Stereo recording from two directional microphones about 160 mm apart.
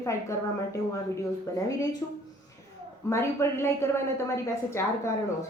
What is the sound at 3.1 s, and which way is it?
A woman's voice, 15° left (ahead or behind).